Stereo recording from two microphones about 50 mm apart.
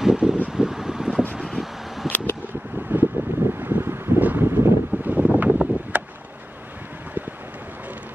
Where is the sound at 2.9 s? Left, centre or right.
Right.